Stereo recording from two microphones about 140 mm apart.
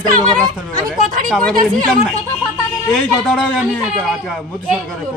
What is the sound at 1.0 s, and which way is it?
Speech, 75° right (ahead or behind).